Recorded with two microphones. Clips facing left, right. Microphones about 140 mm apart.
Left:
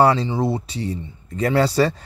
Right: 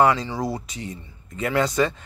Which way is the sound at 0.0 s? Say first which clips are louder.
Left 3 dB; 35° left (ahead or behind).